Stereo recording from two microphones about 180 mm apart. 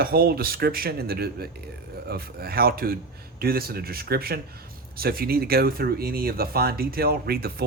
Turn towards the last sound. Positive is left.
turn(degrees=-60)  # may be behind; listen again after turning